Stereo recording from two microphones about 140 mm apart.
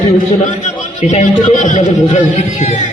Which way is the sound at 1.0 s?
50° left (ahead or behind).